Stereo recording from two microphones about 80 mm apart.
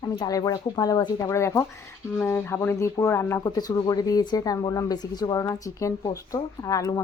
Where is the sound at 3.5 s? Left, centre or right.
Left.